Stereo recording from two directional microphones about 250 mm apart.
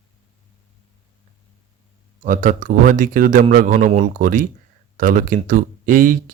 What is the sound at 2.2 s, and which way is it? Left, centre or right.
Speech, right.